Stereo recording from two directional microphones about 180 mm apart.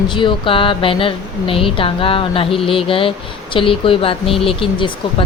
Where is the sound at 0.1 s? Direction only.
25° left (ahead or behind).